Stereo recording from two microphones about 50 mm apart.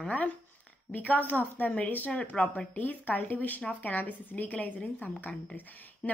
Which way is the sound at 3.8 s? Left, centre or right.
Left.